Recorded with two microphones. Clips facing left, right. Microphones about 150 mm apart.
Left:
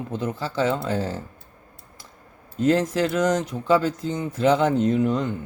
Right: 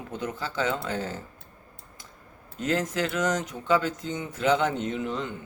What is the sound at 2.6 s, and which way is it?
Speech, 30° left (ahead or behind).